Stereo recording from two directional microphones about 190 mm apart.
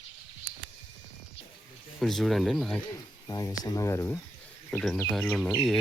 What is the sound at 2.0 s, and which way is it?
Speech, centre (ahead or behind).